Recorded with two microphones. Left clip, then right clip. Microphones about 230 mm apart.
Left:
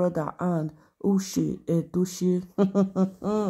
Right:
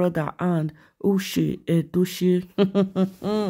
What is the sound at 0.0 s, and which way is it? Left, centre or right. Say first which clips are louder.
Speech: right 2 dB; right.